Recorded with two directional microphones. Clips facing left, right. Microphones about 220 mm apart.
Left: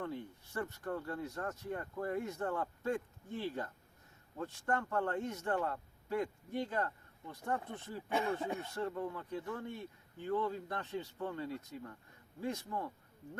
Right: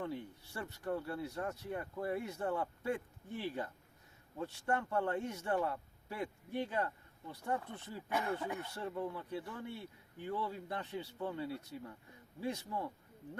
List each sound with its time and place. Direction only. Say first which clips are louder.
0.0 s a man's voice: even; 15° right (ahead or behind)
8.1 s speech: left 2 dB; 25° left (ahead or behind)
8.8 s a man's voice: left 1 dB; 10° right (ahead or behind)